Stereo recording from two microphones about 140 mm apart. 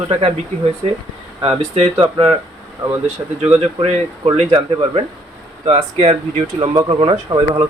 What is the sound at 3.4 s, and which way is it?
Speech, 45° right (ahead or behind).